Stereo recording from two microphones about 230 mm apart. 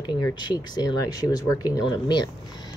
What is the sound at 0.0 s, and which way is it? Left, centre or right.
Speech, centre.